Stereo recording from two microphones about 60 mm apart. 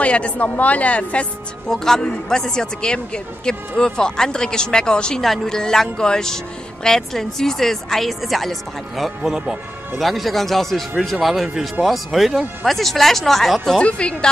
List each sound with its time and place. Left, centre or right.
0.0 s a woman's voice: left
1.7 s a man's voice: centre
13.7 s a man's voice: centre